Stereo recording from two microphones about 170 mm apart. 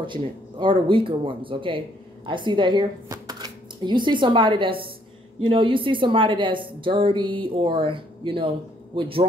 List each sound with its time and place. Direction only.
0.0 s a woman's voice: 30° right (ahead or behind)